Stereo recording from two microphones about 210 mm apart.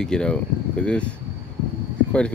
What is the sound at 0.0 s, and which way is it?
Speech, 5° left (ahead or behind).